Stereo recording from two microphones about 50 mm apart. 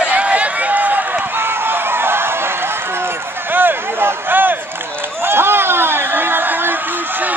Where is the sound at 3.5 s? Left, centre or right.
Right.